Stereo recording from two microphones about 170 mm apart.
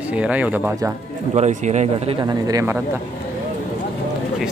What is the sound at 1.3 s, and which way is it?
Speech, 40° right (ahead or behind).